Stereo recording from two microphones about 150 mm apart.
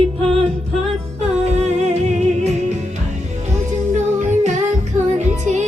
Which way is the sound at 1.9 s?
50° right (ahead or behind).